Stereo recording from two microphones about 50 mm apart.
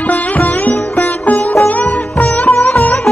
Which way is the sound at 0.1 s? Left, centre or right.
Left.